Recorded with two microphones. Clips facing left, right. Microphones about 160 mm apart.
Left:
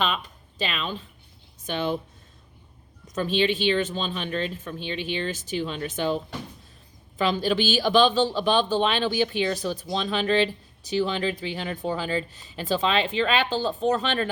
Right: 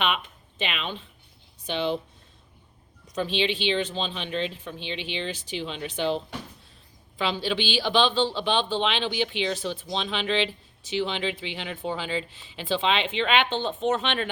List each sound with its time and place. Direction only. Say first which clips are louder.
0.0 s speech: even; 35° left (ahead or behind)
3.2 s speech: left 3 dB; 45° left (ahead or behind)